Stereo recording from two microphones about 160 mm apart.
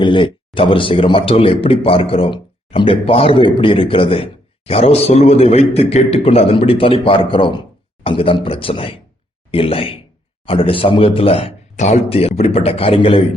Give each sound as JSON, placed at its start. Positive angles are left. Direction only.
{"t": 0.0, "sound": "a man's voice", "side_deg": 30}